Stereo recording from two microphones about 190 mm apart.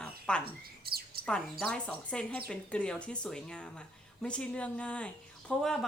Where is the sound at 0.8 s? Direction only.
55° right (ahead or behind).